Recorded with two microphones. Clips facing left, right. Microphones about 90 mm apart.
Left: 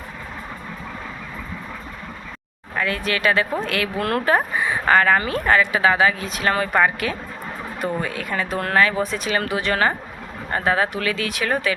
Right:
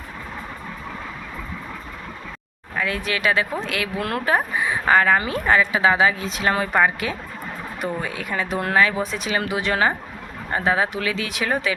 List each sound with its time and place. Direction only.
2.7 s speech: 10° right (ahead or behind)